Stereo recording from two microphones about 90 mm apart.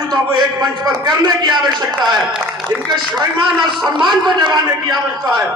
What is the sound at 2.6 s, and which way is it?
A man's voice, 55° right (ahead or behind).